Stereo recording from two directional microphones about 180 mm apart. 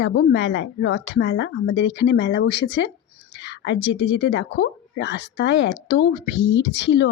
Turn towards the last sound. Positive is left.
turn(degrees=80)